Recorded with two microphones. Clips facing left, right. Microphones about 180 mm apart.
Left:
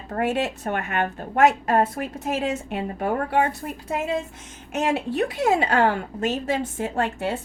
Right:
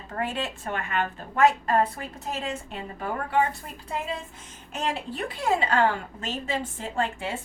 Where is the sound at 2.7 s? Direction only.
55° left (ahead or behind).